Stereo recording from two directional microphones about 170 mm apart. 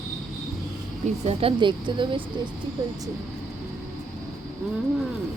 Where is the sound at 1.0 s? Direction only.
40° right (ahead or behind).